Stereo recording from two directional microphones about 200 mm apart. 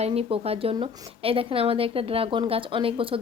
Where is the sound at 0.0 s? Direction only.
30° right (ahead or behind).